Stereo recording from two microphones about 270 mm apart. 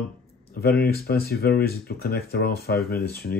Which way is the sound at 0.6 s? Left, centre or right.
Left.